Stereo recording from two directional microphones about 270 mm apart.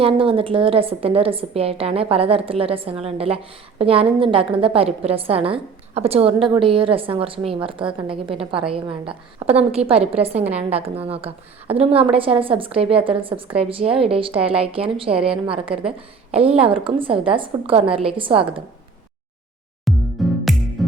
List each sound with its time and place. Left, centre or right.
0.0 s a woman's voice: centre
15.1 s a woman's voice: centre
15.4 s a woman's voice: centre
19.9 s music: centre